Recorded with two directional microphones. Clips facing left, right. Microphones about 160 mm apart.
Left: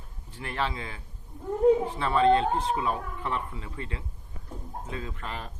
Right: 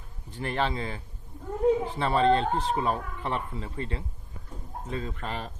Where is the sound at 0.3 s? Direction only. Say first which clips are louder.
Right 3 dB; 35° right (ahead or behind).